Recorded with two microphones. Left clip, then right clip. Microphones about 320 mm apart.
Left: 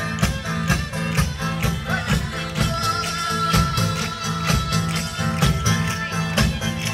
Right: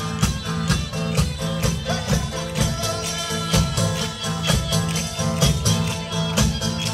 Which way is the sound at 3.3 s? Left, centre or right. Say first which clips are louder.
Left 4 dB; right.